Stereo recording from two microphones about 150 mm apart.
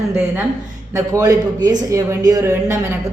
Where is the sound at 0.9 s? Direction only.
20° right (ahead or behind).